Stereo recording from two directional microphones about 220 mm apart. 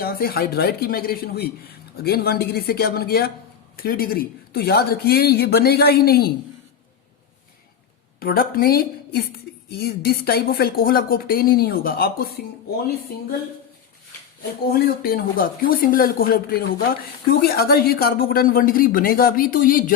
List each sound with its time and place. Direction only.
0.0 s speech: 45° left (ahead or behind)
8.2 s a woman's voice: 40° left (ahead or behind)
14.7 s speech: 40° left (ahead or behind)